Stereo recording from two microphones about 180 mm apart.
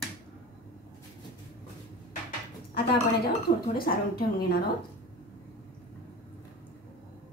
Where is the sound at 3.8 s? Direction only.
55° left (ahead or behind).